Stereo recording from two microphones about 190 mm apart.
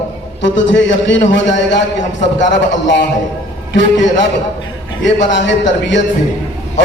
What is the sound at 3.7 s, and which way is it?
Speech, 70° left (ahead or behind).